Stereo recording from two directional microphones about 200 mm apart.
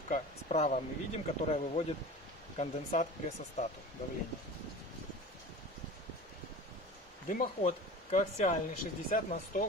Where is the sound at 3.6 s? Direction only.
35° left (ahead or behind).